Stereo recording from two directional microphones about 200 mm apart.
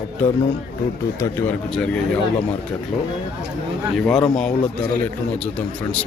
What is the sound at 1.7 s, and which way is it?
Speech, 5° left (ahead or behind).